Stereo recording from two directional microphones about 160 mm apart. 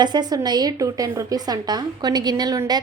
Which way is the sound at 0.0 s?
25° right (ahead or behind).